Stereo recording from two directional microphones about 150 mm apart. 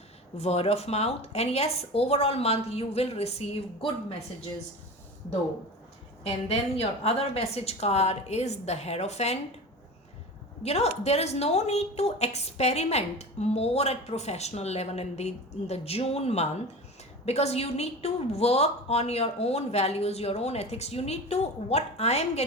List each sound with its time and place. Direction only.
0.3 s a woman's voice: 45° left (ahead or behind)
6.2 s a woman's voice: 40° left (ahead or behind)
10.6 s a woman's voice: 45° left (ahead or behind)